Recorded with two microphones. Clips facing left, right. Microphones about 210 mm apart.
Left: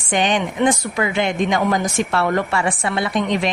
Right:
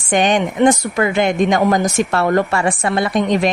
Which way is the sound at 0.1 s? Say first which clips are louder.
Right 4 dB; 45° right (ahead or behind).